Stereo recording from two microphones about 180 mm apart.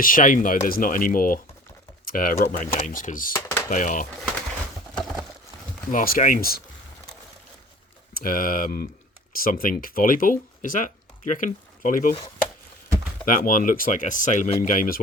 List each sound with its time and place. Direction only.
0.0 s speech: 50° left (ahead or behind)
4.9 s a sound: centre (ahead or behind)
5.9 s speech: 50° left (ahead or behind)
8.1 s speech: 50° left (ahead or behind)
13.2 s speech: 50° left (ahead or behind)